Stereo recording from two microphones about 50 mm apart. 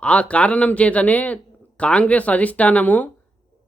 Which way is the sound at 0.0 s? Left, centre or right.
Left.